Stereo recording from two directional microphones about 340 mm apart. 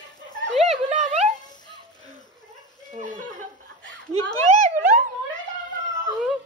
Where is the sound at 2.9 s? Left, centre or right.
Right.